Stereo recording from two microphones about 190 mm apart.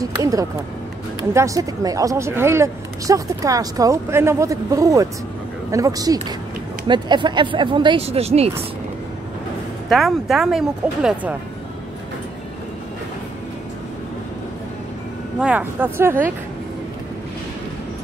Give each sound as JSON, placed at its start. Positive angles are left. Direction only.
{"t": 0.0, "sound": "speech", "side_deg": -20}
{"t": 9.8, "sound": "speech", "side_deg": 0}
{"t": 15.3, "sound": "speech", "side_deg": -5}